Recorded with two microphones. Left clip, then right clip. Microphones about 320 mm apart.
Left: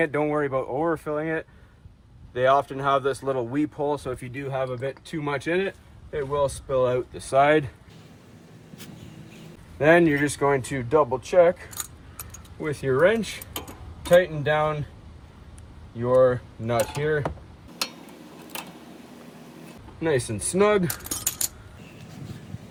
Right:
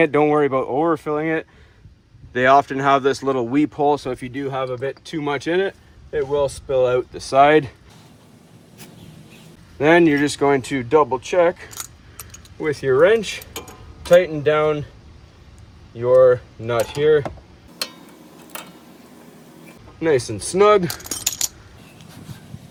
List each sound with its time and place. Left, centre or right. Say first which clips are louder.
0.0 s speech: right 8 dB; right
9.7 s speech: right 4 dB; right
16.0 s speech: right 6 dB; right
20.6 s speech: right 7 dB; right